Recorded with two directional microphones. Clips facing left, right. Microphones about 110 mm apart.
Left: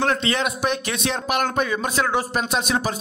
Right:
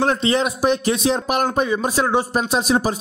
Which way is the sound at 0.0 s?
35° right (ahead or behind).